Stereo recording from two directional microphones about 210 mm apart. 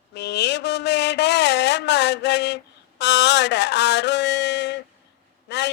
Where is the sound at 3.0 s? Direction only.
55° left (ahead or behind).